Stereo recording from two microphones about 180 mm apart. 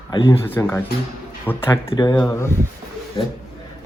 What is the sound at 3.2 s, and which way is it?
Speech, 25° left (ahead or behind).